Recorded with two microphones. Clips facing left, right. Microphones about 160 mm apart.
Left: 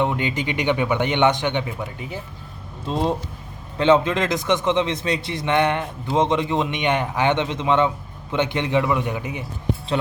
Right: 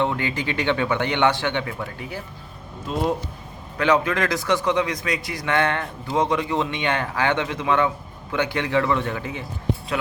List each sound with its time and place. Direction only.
0.0 s a man's voice: 20° left (ahead or behind)
3.8 s a man's voice: 25° left (ahead or behind)